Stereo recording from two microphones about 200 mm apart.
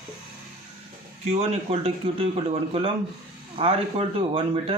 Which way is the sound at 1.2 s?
30° right (ahead or behind).